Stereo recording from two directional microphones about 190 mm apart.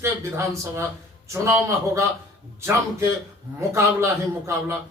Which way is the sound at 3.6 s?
15° right (ahead or behind).